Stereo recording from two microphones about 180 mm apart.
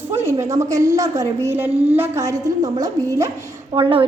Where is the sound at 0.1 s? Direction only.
15° right (ahead or behind).